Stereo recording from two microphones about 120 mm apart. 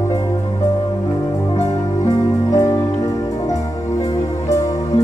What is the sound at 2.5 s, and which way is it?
Music, 30° left (ahead or behind).